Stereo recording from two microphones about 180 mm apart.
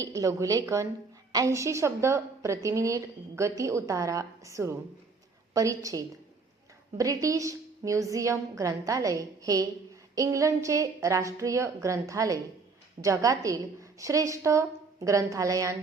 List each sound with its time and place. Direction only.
0.0 s a woman's voice: 20° right (ahead or behind)